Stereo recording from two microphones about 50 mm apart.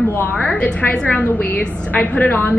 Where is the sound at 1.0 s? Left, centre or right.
Left.